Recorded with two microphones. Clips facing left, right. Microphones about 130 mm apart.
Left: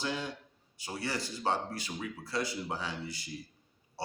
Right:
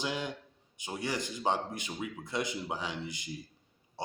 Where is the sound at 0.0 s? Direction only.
15° right (ahead or behind).